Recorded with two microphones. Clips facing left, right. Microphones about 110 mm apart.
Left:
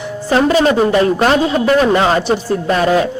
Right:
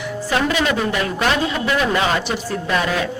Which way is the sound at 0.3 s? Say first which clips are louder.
Left 8 dB; 35° left (ahead or behind).